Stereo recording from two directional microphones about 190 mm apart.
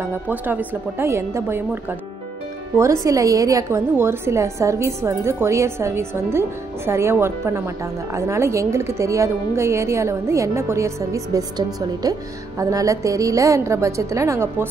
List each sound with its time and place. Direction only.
0.3 s a woman's voice: 10° right (ahead or behind)
3.1 s a woman's voice: 15° right (ahead or behind)